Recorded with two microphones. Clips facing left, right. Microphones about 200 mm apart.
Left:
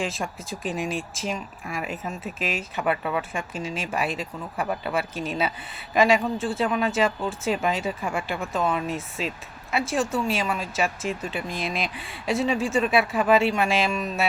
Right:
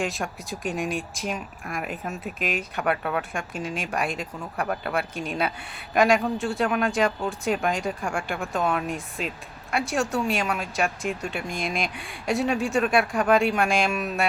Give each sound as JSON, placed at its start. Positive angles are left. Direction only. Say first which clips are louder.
{"t": 0.0, "sound": "speech", "louder": "right 1 dB", "side_deg": 0}